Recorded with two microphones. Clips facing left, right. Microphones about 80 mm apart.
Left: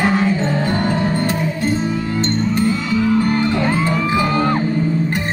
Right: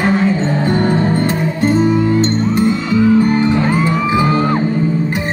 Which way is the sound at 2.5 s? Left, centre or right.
Centre.